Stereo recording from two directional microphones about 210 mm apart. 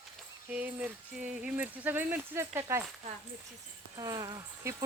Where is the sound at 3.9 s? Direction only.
15° right (ahead or behind).